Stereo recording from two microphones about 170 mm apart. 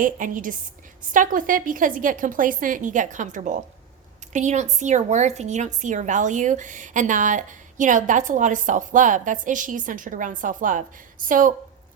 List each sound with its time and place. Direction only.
0.0 s a woman's voice: 50° right (ahead or behind)